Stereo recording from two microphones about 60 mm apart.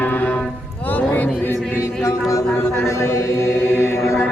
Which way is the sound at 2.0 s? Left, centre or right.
Left.